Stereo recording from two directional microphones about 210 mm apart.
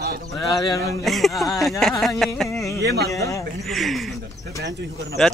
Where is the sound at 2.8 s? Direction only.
50° right (ahead or behind).